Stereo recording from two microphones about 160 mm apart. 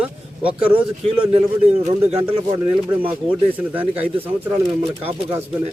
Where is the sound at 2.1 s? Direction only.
40° right (ahead or behind).